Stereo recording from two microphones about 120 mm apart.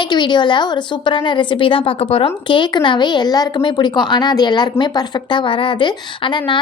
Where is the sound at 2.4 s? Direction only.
40° left (ahead or behind).